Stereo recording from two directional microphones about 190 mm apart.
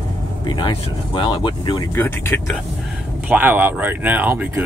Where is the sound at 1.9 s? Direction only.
10° left (ahead or behind).